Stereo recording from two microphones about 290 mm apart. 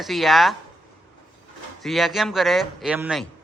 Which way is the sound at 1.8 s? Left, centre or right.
Centre.